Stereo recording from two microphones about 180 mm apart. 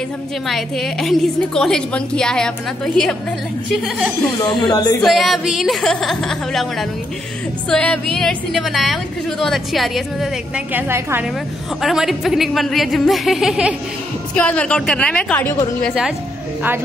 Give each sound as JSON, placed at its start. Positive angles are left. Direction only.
{"t": 0.5, "sound": "a woman's voice", "side_deg": 0}
{"t": 4.6, "sound": "speech", "side_deg": 20}
{"t": 5.0, "sound": "a woman's voice", "side_deg": 0}
{"t": 11.8, "sound": "a woman's voice", "side_deg": 0}
{"t": 14.3, "sound": "a woman's voice", "side_deg": 5}